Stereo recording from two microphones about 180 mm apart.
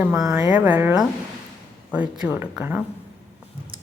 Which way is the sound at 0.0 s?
15° right (ahead or behind).